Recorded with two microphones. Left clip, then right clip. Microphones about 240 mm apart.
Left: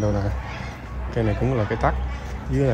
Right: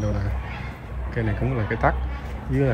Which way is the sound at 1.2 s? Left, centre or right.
Centre.